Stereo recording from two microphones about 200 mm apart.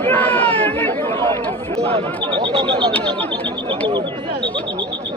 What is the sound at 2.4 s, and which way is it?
Speech, 25° right (ahead or behind).